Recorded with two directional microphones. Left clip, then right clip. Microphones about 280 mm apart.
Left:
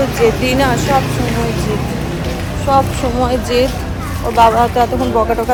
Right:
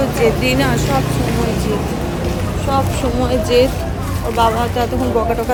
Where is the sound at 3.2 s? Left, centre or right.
Centre.